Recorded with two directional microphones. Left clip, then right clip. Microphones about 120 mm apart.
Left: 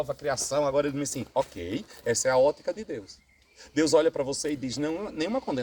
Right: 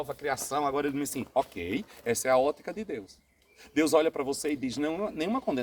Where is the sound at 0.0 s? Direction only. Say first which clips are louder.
Left 3 dB; 35° right (ahead or behind).